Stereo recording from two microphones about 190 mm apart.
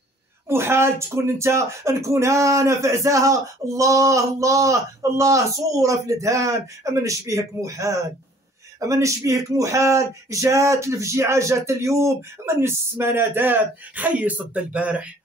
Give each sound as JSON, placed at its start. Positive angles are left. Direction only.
{"t": 0.5, "sound": "speech", "side_deg": -15}